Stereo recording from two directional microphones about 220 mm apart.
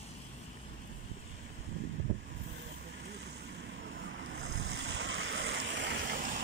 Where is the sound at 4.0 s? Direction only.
50° right (ahead or behind).